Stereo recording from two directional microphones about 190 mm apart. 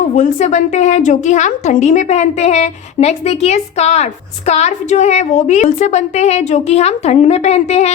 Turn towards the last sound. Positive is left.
turn(degrees=35)  # may be behind; listen again after turning